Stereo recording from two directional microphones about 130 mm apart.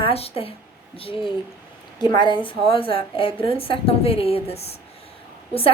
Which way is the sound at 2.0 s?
35° left (ahead or behind).